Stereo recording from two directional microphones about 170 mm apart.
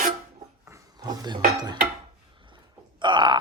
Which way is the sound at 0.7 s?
20° right (ahead or behind).